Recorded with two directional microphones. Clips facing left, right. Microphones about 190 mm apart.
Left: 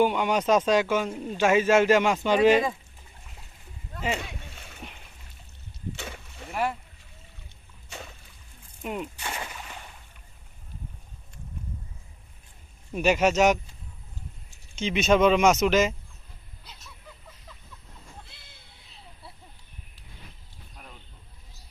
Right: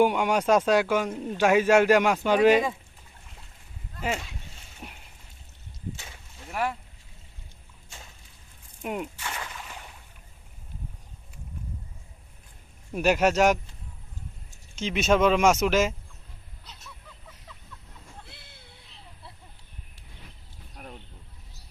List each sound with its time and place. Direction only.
0.0 s speech: 10° right (ahead or behind)
4.2 s splash: 65° left (ahead or behind)
5.9 s a sound: 65° left (ahead or behind)
6.5 s speech: 5° left (ahead or behind)
7.9 s a sound: 70° left (ahead or behind)
8.8 s speech: 15° right (ahead or behind)
9.2 s speech: 25° left (ahead or behind)
12.9 s speech: 5° right (ahead or behind)
14.8 s speech: centre (ahead or behind)
18.3 s vehicle: 60° right (ahead or behind)